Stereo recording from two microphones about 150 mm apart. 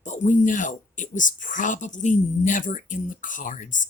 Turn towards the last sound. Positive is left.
turn(degrees=60)  # may be behind; listen again after turning